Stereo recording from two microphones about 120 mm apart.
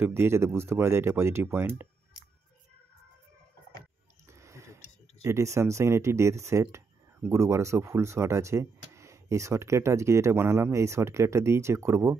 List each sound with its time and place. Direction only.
0.0 s speech: 20° right (ahead or behind)
4.3 s a sound: 25° right (ahead or behind)
5.2 s speech: 25° right (ahead or behind)